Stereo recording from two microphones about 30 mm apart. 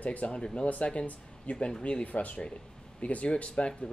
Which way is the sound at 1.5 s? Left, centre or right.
Left.